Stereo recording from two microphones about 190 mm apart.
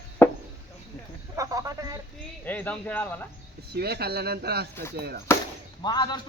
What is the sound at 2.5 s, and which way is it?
Speech, 10° left (ahead or behind).